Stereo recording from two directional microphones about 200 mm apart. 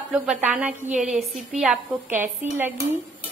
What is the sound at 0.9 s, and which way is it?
Speech, 40° right (ahead or behind).